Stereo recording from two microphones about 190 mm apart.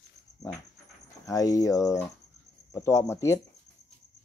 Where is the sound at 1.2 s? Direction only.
20° left (ahead or behind).